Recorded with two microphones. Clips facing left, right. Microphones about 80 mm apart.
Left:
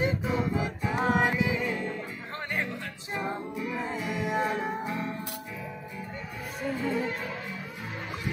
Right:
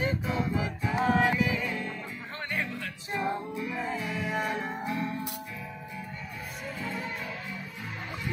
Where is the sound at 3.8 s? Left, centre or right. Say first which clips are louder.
Left 1 dB; centre.